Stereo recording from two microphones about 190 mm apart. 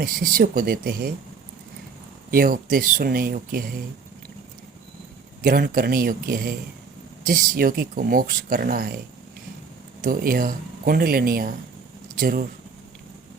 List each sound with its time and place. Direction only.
0.0 s speech: 50° right (ahead or behind)
2.3 s speech: 50° right (ahead or behind)
5.4 s speech: 50° right (ahead or behind)
10.0 s speech: 50° right (ahead or behind)